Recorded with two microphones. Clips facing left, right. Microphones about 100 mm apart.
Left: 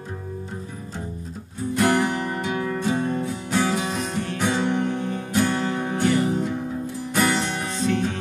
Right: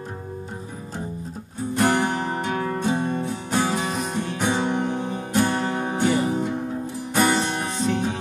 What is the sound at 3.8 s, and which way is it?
Music, 15° right (ahead or behind).